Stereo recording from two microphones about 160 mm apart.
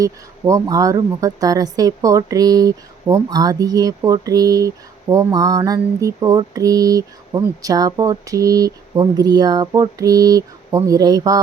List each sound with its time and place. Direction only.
0.0 s speech: 20° right (ahead or behind)